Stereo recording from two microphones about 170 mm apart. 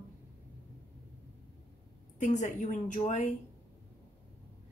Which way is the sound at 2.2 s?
45° left (ahead or behind).